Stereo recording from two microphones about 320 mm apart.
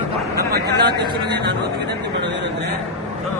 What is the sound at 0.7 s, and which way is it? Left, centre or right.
Speech, centre.